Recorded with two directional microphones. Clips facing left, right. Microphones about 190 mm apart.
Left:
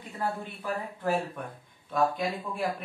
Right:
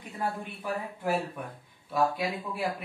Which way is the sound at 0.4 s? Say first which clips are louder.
Even; 15° right (ahead or behind).